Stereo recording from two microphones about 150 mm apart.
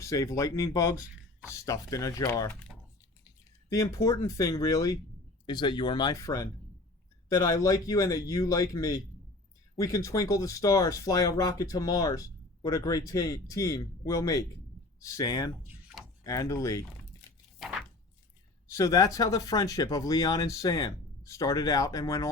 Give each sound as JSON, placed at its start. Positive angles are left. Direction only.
{"t": 0.0, "sound": "speech", "side_deg": 20}
{"t": 3.7, "sound": "speech", "side_deg": 20}
{"t": 17.6, "sound": "a sound", "side_deg": 0}
{"t": 18.7, "sound": "speech", "side_deg": 25}